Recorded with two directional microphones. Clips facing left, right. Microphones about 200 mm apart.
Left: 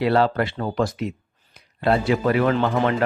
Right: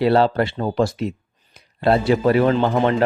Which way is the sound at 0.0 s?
30° right (ahead or behind).